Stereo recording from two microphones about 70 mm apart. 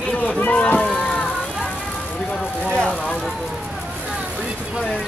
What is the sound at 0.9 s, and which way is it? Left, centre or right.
Run, centre.